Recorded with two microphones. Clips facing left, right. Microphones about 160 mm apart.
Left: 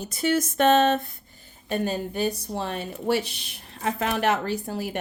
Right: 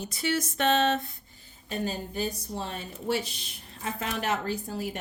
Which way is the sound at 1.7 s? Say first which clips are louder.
Left 5 dB; 60° left (ahead or behind).